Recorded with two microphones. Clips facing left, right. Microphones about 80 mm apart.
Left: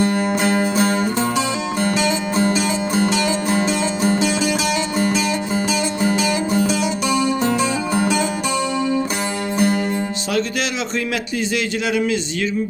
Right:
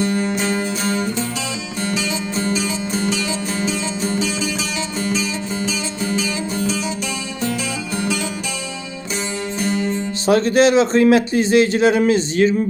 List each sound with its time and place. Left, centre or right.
2.5 s music: left
9.6 s music: left
10.2 s a man's voice: right